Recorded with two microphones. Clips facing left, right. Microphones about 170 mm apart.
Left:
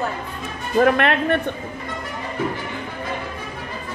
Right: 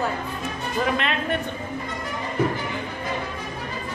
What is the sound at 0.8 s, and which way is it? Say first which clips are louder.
Speech: left 8 dB; 60° left (ahead or behind).